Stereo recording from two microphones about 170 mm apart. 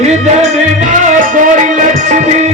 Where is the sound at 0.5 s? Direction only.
50° right (ahead or behind).